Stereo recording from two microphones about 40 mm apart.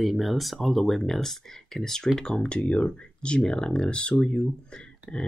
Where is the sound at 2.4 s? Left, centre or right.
Left.